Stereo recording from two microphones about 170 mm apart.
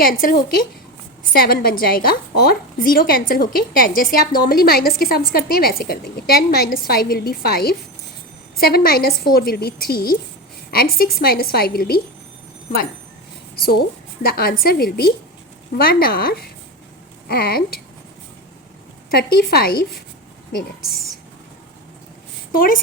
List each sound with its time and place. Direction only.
0.0 s a woman's voice: 55° left (ahead or behind)
13.6 s a woman's voice: 65° left (ahead or behind)
19.1 s a woman's voice: 65° left (ahead or behind)
22.5 s a woman's voice: 55° left (ahead or behind)